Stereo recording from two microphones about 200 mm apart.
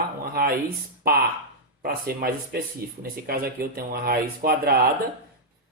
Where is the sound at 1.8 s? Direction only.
45° right (ahead or behind).